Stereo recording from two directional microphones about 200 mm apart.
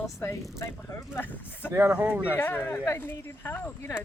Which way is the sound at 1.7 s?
10° right (ahead or behind).